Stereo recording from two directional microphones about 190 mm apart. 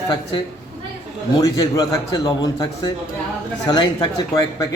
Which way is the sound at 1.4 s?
20° left (ahead or behind).